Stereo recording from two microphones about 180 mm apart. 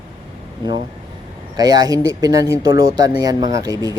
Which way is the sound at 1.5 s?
20° right (ahead or behind).